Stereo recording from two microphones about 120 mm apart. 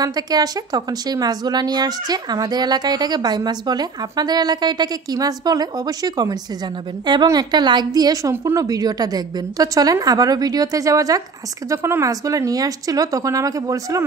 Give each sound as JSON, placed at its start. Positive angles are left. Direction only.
{"t": 0.0, "sound": "speech", "side_deg": -35}